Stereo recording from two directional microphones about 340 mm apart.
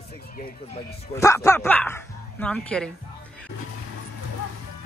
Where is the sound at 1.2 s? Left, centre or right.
Centre.